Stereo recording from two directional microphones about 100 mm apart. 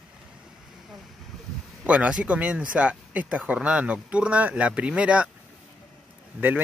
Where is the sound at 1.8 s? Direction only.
10° right (ahead or behind).